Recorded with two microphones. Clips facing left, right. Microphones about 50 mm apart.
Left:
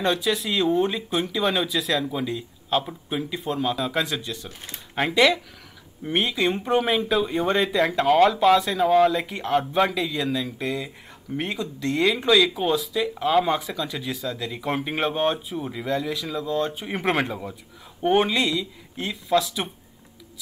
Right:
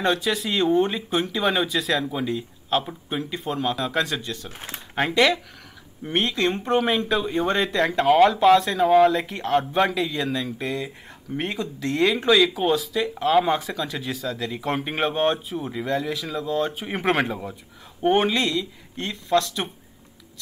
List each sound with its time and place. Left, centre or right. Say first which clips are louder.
0.0 s speech: even; centre
4.5 s speech: right 3 dB; right
4.9 s speech: even; centre